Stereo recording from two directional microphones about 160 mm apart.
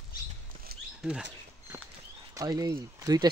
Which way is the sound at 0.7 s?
70° right (ahead or behind).